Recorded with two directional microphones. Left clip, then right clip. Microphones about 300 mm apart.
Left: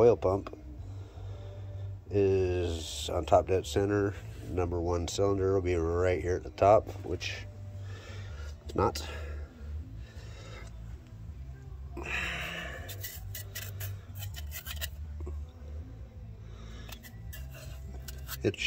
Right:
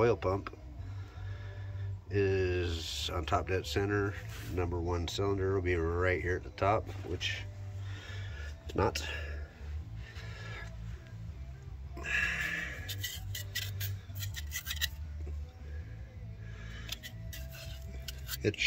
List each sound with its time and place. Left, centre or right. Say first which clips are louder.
0.0 s speech: left 6 dB; centre
2.0 s speech: left 4 dB; centre
8.7 s speech: left 2 dB; centre
12.0 s a sound: right 2 dB; centre
14.3 s scissors: right 4 dB; centre
17.6 s a sound: right 1 dB; left